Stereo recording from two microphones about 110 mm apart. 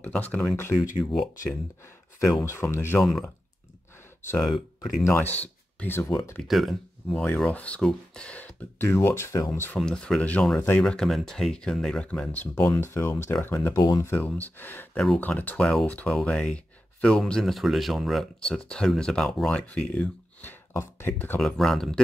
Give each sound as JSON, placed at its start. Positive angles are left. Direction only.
{"t": 0.0, "sound": "speech", "side_deg": 15}
{"t": 2.4, "sound": "speech", "side_deg": 25}
{"t": 3.0, "sound": "speech", "side_deg": 0}
{"t": 4.4, "sound": "speech", "side_deg": 5}
{"t": 5.0, "sound": "speech", "side_deg": 15}
{"t": 6.4, "sound": "speech", "side_deg": 0}
{"t": 8.9, "sound": "speech", "side_deg": 25}
{"t": 9.8, "sound": "speech", "side_deg": 10}
{"t": 13.7, "sound": "speech", "side_deg": 30}
{"t": 14.1, "sound": "speech", "side_deg": 15}
{"t": 21.4, "sound": "speech", "side_deg": 5}